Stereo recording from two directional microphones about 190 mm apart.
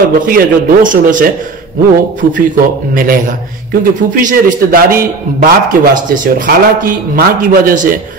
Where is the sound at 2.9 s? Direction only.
45° right (ahead or behind).